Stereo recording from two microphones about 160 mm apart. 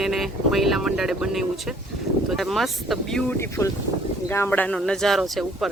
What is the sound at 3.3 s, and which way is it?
Speech, 15° left (ahead or behind).